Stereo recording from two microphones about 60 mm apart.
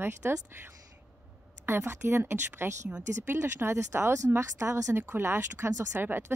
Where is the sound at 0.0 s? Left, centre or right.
Right.